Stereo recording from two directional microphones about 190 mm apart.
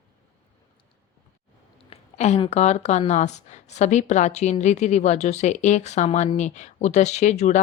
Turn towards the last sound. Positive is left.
turn(degrees=40)  # may be behind; listen again after turning